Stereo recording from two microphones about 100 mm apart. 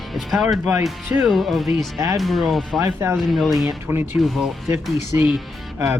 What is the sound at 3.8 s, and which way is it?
Speech, 20° right (ahead or behind).